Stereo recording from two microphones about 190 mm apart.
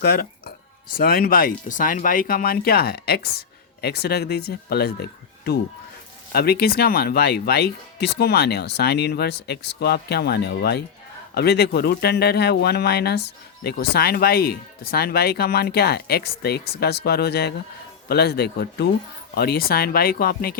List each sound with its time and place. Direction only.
0.0 s a sound: 55° left (ahead or behind)
0.9 s speech: 50° left (ahead or behind)
6.3 s speech: 55° left (ahead or behind)